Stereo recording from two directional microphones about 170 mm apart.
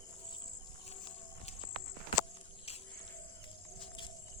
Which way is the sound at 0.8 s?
35° left (ahead or behind).